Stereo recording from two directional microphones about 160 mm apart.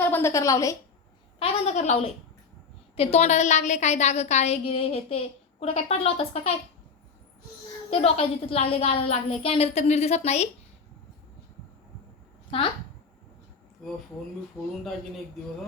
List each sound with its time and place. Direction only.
0.1 s a woman's voice: 15° left (ahead or behind)
1.4 s a woman's voice: 40° left (ahead or behind)
7.9 s a woman's voice: 40° left (ahead or behind)
12.5 s speech: 35° left (ahead or behind)
14.6 s a woman's voice: 20° left (ahead or behind)